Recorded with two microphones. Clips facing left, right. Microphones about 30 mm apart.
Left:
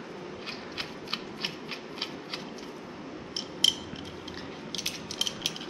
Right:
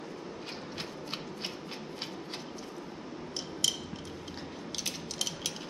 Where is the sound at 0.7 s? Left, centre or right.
Left.